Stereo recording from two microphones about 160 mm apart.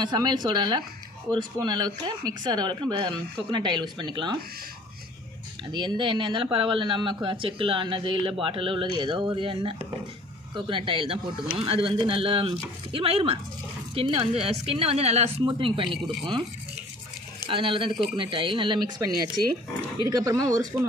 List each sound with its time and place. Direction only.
0.0 s speech: 25° right (ahead or behind)
5.7 s speech: 30° right (ahead or behind)
17.5 s speech: 35° right (ahead or behind)